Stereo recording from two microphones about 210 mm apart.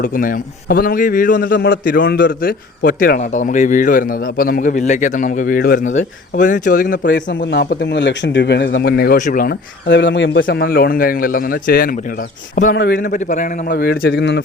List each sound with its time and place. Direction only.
0.0 s a man's voice: 40° left (ahead or behind)
1.5 s speech: 55° left (ahead or behind)
1.8 s a man's voice: 40° left (ahead or behind); by 10.7 s 60° left (ahead or behind)
10.7 s a man's voice: 45° left (ahead or behind)
12.7 s speech: 60° left (ahead or behind)
13.0 s a man's voice: 40° left (ahead or behind)
13.7 s a man's voice: 50° left (ahead or behind)